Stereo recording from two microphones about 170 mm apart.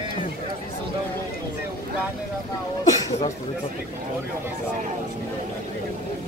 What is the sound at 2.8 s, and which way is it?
Speech, 20° left (ahead or behind).